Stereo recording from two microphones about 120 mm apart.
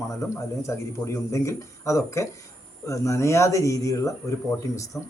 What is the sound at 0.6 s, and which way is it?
A man's voice, 25° left (ahead or behind).